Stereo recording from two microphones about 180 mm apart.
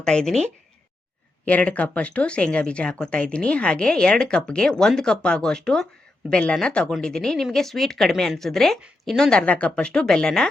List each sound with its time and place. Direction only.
0.0 s speech: 5° left (ahead or behind)
1.5 s speech: 5° left (ahead or behind)